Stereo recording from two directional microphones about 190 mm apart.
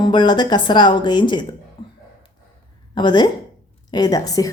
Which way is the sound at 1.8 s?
25° left (ahead or behind).